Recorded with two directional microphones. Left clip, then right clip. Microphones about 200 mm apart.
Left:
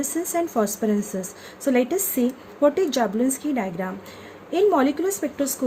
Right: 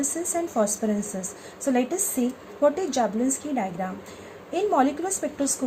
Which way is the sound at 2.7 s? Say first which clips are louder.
Left 3 dB; 45° left (ahead or behind).